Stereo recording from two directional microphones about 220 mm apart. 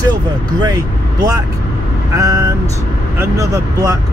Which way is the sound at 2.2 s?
15° right (ahead or behind).